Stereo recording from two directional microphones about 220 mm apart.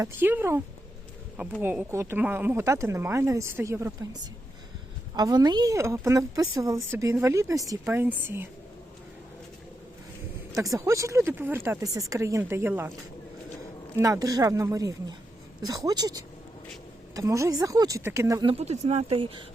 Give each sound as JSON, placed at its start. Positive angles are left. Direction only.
{"t": 0.0, "sound": "a woman's voice", "side_deg": -10}
{"t": 1.6, "sound": "a woman's voice", "side_deg": -10}
{"t": 10.5, "sound": "a woman's voice", "side_deg": -15}
{"t": 13.9, "sound": "a woman's voice", "side_deg": -15}